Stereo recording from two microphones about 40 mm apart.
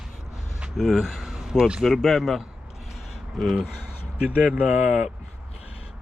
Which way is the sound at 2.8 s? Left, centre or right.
Centre.